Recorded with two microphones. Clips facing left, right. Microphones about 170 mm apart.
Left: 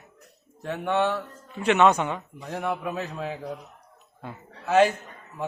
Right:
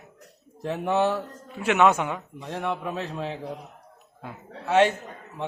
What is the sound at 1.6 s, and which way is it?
A man's voice, 5° right (ahead or behind).